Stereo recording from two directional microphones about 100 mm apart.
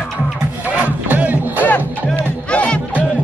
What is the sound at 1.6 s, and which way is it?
Music, 15° left (ahead or behind).